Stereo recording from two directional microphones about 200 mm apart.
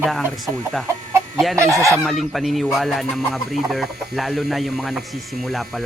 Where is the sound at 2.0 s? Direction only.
Centre (ahead or behind).